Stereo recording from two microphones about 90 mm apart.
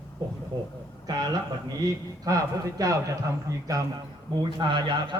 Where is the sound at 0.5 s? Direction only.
50° right (ahead or behind).